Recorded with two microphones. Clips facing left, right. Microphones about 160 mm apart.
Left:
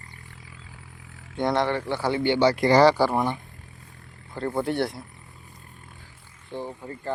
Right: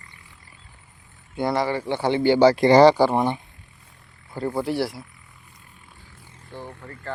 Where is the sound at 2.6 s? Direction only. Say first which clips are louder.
Right 2 dB; 20° right (ahead or behind).